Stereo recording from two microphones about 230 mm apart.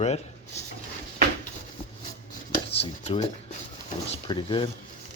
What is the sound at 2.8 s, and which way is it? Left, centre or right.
Speech, left.